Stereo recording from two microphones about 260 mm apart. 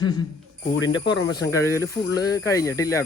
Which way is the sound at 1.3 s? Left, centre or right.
Centre.